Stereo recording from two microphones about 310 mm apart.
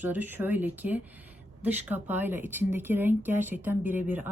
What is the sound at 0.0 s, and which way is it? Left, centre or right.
Speech, centre.